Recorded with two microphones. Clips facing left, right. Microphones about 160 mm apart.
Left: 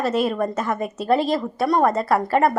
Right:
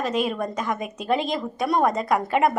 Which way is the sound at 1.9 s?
15° right (ahead or behind).